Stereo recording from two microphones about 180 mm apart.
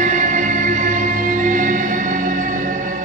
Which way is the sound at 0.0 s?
45° right (ahead or behind).